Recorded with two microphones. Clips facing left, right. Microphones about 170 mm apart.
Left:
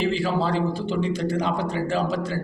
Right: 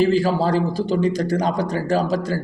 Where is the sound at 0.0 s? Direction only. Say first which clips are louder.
Right 6 dB; 40° right (ahead or behind).